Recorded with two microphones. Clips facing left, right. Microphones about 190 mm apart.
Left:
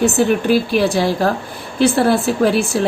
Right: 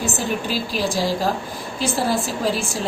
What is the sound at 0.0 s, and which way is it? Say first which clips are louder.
Speech: left 9 dB; 65° left (ahead or behind).